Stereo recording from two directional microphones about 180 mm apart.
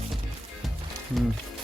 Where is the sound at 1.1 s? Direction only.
Centre (ahead or behind).